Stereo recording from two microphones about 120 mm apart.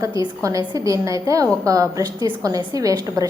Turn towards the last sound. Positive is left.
turn(degrees=-30)  # may be behind; listen again after turning